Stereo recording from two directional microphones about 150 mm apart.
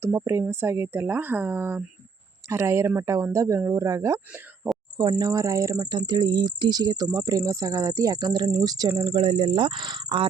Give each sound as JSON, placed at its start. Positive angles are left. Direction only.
{"t": 0.0, "sound": "speech", "side_deg": -20}
{"t": 9.1, "sound": "speech", "side_deg": -40}